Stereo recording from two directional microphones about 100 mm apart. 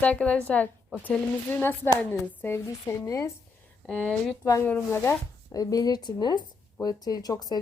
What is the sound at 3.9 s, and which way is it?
A woman's voice, 10° left (ahead or behind).